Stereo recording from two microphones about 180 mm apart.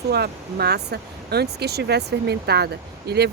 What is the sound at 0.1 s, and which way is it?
Speech, 60° right (ahead or behind).